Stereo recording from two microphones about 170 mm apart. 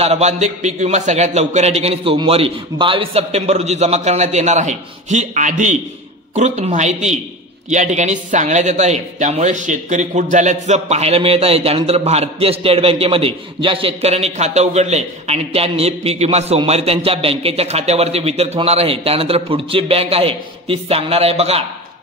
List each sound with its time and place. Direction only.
0.0 s a man's voice: 40° right (ahead or behind)